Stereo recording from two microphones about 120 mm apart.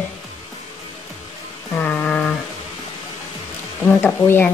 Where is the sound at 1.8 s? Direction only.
10° left (ahead or behind).